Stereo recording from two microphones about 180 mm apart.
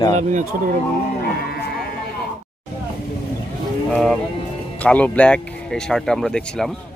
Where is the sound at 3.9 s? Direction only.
Centre (ahead or behind).